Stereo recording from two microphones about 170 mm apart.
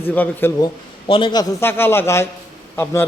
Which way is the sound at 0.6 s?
30° left (ahead or behind).